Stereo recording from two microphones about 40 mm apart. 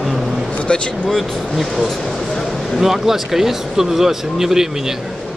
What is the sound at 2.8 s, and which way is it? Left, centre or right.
Speech, centre.